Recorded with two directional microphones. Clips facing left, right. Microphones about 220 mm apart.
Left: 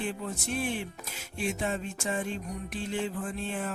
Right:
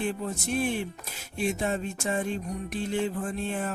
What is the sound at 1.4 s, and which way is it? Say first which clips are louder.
Music: right 3 dB; 45° right (ahead or behind).